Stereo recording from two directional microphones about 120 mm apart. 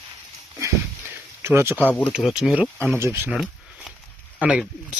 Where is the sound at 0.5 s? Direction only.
20° right (ahead or behind).